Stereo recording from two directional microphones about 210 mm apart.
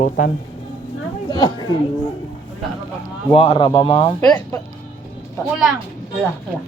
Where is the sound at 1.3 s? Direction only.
20° left (ahead or behind).